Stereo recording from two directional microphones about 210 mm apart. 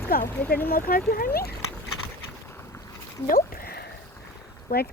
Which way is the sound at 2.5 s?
10° left (ahead or behind).